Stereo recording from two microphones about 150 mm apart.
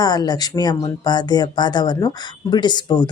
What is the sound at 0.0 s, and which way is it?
Speech, 25° left (ahead or behind).